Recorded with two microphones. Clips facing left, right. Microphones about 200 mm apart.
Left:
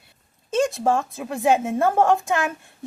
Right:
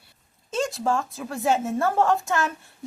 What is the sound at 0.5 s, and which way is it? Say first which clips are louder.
A woman's voice: left 4 dB; 20° left (ahead or behind).